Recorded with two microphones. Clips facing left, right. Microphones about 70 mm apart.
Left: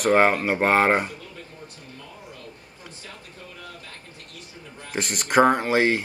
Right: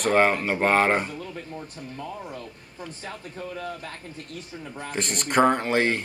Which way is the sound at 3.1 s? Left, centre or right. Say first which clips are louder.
Right 9 dB; right.